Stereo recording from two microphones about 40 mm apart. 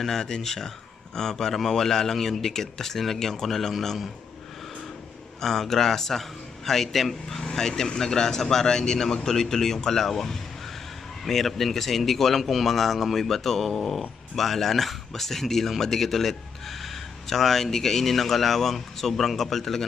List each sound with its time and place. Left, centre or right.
0.0 s a man's voice: centre
5.4 s a man's voice: centre